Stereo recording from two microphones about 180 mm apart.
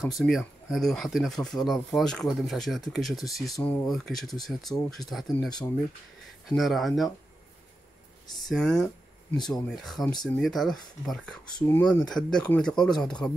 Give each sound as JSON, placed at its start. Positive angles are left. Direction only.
{"t": 0.0, "sound": "speech", "side_deg": 0}
{"t": 8.4, "sound": "speech", "side_deg": 0}
{"t": 11.5, "sound": "speech", "side_deg": 15}
{"t": 11.8, "sound": "speech", "side_deg": 5}